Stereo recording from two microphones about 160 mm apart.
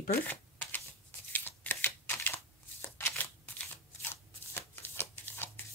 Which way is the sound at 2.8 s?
15° left (ahead or behind).